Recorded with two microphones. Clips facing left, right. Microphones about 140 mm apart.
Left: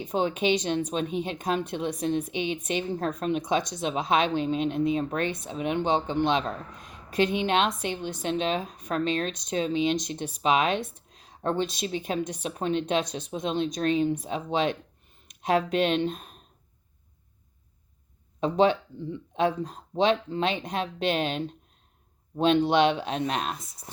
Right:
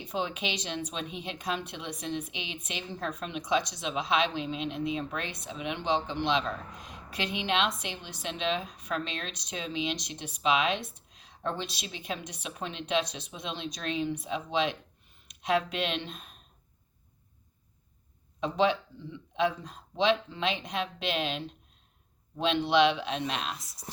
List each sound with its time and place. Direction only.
0.0 s speech: 45° left (ahead or behind)
18.3 s speech: 45° left (ahead or behind)